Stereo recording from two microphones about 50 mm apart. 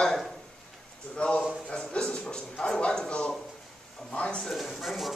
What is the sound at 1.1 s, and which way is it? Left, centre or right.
A man's voice, left.